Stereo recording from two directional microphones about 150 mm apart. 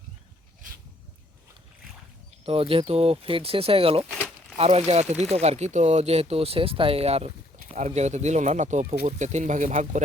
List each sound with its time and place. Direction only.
2.5 s speech: 40° right (ahead or behind); by 10.0 s 55° right (ahead or behind)